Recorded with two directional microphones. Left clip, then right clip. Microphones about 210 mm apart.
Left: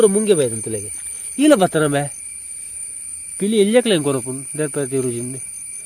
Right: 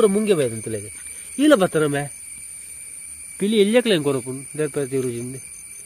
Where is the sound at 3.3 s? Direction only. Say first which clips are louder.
Left 2 dB; 5° left (ahead or behind).